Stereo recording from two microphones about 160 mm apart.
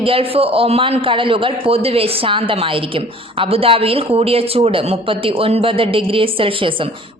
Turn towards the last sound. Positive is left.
turn(degrees=-30)  # may be behind; listen again after turning